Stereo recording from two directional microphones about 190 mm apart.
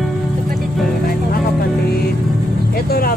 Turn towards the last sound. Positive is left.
turn(degrees=50)  # may be behind; listen again after turning